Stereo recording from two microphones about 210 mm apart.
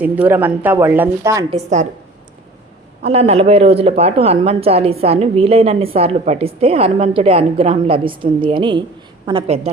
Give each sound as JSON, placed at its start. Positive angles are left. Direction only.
{"t": 0.0, "sound": "a woman's voice", "side_deg": -10}
{"t": 1.5, "sound": "a woman's voice", "side_deg": -35}
{"t": 3.0, "sound": "speech", "side_deg": -30}